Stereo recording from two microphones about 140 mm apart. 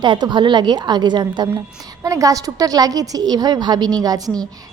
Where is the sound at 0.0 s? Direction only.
35° right (ahead or behind).